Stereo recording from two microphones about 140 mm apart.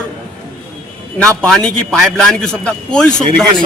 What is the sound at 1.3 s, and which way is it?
A man's voice, 5° left (ahead or behind).